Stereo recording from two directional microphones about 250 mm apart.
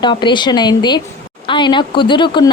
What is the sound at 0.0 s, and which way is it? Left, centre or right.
A woman's voice, centre.